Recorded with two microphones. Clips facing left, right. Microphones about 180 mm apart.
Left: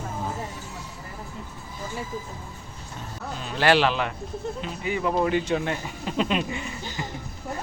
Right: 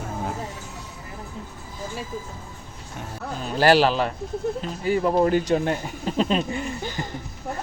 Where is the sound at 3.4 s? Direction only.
40° right (ahead or behind).